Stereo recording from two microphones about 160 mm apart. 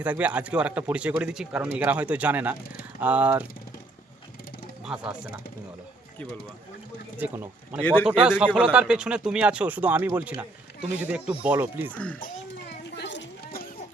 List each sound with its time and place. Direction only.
0.0 s speech: 10° right (ahead or behind)
7.2 s speech: 10° right (ahead or behind)
7.8 s speech: 10° left (ahead or behind)
8.0 s speech: 5° right (ahead or behind)
13.0 s a sound: 90° left